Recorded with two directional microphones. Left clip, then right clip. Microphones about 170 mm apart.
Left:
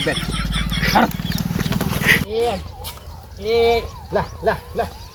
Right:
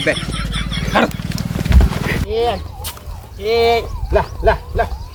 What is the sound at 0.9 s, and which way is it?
Wild animals, 50° right (ahead or behind).